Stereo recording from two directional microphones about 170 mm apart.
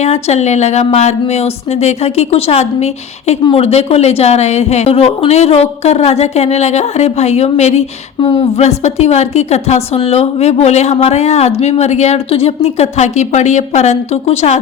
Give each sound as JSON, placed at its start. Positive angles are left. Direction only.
{"t": 0.0, "sound": "speech", "side_deg": 40}